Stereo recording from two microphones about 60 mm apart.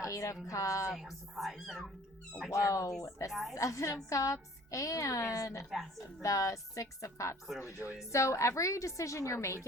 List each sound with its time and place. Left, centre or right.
0.0 s a woman's voice: left
0.9 s speech: centre
2.5 s a woman's voice: left